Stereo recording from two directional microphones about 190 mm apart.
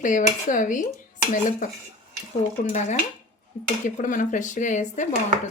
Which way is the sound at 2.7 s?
40° left (ahead or behind).